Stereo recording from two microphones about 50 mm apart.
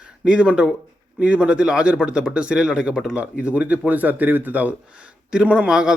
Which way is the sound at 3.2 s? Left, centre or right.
Right.